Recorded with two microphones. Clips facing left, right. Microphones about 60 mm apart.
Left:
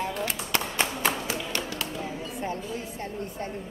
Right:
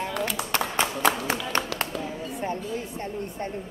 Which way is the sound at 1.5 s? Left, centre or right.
Right.